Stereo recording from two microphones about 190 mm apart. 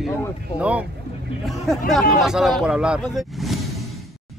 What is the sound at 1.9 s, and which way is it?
Speech, centre (ahead or behind).